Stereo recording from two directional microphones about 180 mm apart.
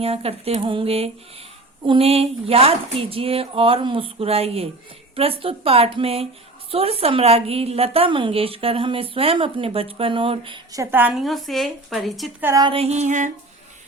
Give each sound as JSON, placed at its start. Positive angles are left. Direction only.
{"t": 0.0, "sound": "a woman's voice", "side_deg": -35}
{"t": 12.4, "sound": "speech", "side_deg": -15}
{"t": 12.6, "sound": "a woman's voice", "side_deg": -35}